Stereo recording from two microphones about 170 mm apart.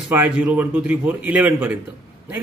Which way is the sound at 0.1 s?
10° right (ahead or behind).